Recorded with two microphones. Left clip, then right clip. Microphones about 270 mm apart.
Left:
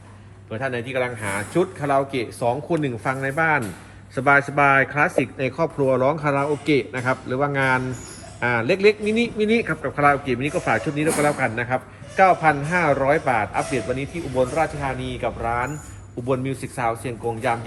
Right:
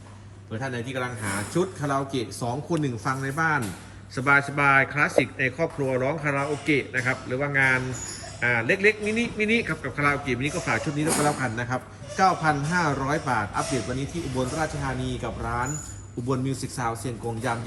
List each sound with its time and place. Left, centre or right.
0.6 s a man's voice: centre
5.4 s speech: left
8.6 s speech: centre
9.6 s a man's voice: centre
16.2 s speech: centre